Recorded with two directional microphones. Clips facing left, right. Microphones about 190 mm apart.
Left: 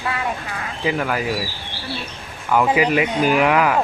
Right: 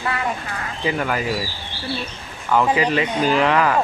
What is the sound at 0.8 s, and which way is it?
Speech, centre (ahead or behind).